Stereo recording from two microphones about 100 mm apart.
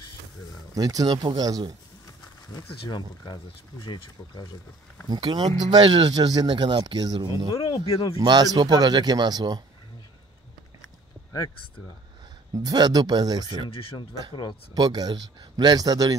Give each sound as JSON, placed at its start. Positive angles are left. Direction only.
{"t": 0.7, "sound": "speech", "side_deg": -40}
{"t": 3.8, "sound": "speech", "side_deg": 50}
{"t": 5.1, "sound": "speech", "side_deg": -50}
{"t": 12.5, "sound": "speech", "side_deg": -40}
{"t": 13.7, "sound": "speech", "side_deg": 65}
{"t": 14.3, "sound": "speech", "side_deg": 50}
{"t": 14.7, "sound": "speech", "side_deg": -45}